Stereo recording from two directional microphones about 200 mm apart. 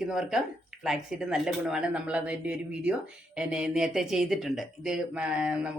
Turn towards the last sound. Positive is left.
turn(degrees=-5)  # may be behind; listen again after turning